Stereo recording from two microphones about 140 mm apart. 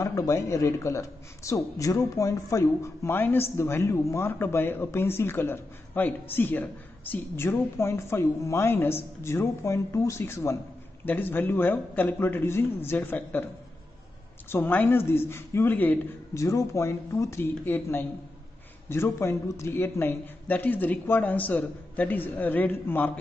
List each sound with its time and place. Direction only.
0.0 s a man's voice: 20° left (ahead or behind)
14.5 s speech: 15° left (ahead or behind)